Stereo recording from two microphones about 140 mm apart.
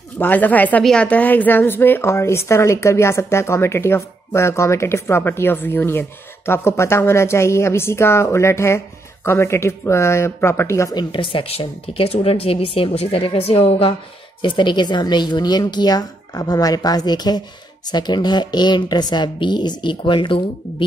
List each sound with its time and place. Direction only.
0.2 s a woman's voice: 10° left (ahead or behind); by 13.9 s 45° left (ahead or behind)
14.4 s speech: 35° left (ahead or behind)